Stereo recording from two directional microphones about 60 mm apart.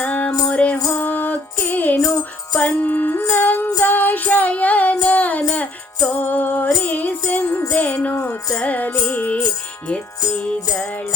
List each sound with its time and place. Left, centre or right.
0.0 s music: left
2.5 s music: centre
2.8 s music: left
5.4 s music: centre